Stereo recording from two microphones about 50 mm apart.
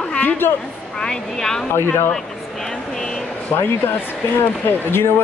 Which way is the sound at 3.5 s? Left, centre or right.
Left.